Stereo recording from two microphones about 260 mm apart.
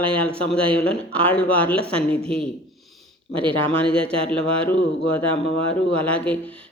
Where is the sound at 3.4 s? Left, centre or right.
Centre.